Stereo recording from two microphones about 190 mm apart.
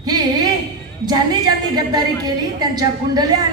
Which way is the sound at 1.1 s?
20° right (ahead or behind).